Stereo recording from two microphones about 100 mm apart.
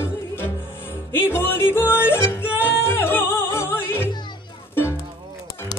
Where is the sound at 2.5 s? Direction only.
25° left (ahead or behind).